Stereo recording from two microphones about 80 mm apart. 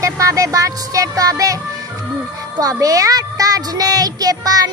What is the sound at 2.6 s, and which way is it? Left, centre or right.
Speech, right.